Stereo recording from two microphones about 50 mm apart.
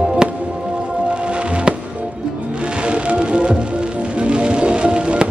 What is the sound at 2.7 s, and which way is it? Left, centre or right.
Music, right.